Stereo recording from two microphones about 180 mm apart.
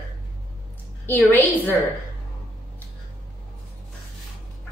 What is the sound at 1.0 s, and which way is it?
Speech, 10° left (ahead or behind).